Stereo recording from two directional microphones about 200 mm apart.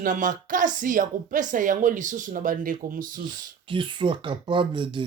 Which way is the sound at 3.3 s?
25° right (ahead or behind).